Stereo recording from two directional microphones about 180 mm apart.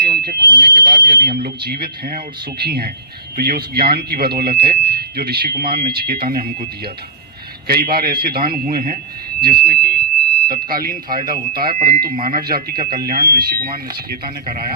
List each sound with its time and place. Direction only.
0.0 s alarm: 55° right (ahead or behind)
0.3 s alarm: 25° right (ahead or behind)
0.8 s speech: 55° right (ahead or behind)